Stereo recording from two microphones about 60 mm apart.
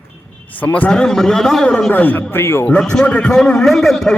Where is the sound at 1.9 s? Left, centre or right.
Left.